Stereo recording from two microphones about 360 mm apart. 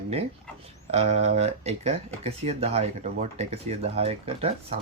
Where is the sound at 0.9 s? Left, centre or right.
Centre.